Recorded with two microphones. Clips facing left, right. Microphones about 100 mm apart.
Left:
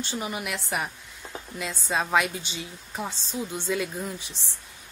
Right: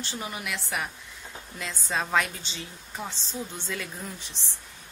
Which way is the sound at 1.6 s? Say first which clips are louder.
Left 2 dB; 10° left (ahead or behind).